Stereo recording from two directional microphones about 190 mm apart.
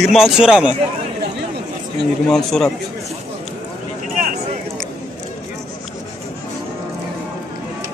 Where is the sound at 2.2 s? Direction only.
5° left (ahead or behind).